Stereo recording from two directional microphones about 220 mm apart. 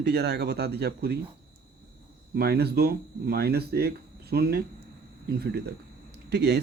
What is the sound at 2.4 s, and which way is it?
A man's voice, 45° right (ahead or behind).